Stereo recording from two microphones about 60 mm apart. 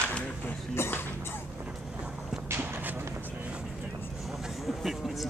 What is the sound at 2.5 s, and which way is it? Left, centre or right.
Walk, right.